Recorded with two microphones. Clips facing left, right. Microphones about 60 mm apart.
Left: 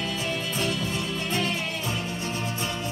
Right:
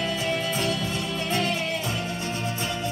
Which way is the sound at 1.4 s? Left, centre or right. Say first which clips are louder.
Right 2 dB; left.